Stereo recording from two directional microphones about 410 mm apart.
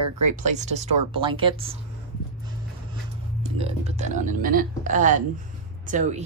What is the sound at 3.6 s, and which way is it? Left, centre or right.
Speech, centre.